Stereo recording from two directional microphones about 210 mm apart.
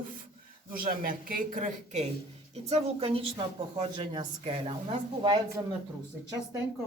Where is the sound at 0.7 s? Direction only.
45° right (ahead or behind); by 5.6 s 20° right (ahead or behind).